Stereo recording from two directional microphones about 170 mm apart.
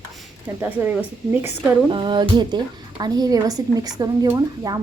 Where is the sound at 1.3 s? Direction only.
10° right (ahead or behind).